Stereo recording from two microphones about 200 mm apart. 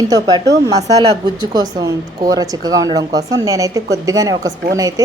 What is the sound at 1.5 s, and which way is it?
A woman's voice, 20° right (ahead or behind).